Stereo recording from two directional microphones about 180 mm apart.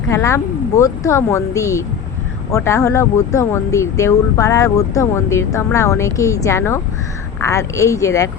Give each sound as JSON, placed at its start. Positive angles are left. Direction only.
{"t": 0.1, "sound": "speech", "side_deg": 15}